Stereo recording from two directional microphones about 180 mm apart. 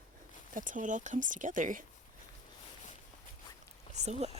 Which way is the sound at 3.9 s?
40° right (ahead or behind).